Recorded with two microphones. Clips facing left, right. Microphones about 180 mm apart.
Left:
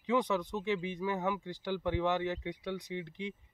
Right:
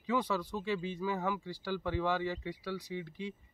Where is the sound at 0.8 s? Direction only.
15° left (ahead or behind).